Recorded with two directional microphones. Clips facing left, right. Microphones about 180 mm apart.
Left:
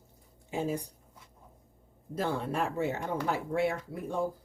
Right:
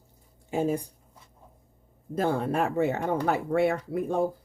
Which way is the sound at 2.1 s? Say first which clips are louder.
Right 6 dB; 55° right (ahead or behind).